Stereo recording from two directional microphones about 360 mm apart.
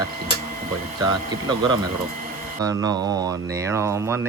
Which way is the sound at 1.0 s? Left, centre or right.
Centre.